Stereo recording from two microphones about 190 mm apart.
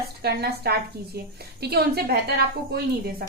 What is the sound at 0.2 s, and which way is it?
A woman's voice, 55° right (ahead or behind).